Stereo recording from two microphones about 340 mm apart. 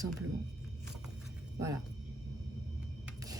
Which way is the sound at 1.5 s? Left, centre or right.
Centre.